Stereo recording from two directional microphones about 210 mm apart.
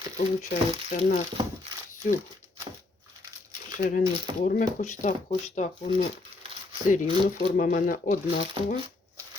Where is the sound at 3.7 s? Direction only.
40° left (ahead or behind).